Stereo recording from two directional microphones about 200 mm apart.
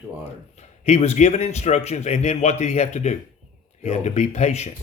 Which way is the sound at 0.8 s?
35° left (ahead or behind).